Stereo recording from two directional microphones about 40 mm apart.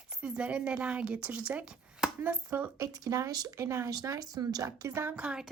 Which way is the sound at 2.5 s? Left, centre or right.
Right.